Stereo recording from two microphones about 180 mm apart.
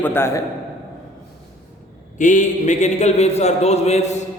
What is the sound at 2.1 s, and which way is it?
Speech, 45° left (ahead or behind).